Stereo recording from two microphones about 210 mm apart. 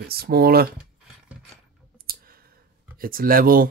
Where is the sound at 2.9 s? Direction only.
45° right (ahead or behind).